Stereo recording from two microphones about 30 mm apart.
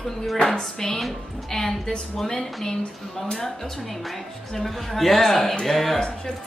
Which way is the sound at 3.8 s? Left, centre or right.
Centre.